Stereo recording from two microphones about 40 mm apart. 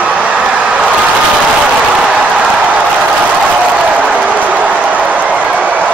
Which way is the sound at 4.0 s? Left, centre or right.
Right.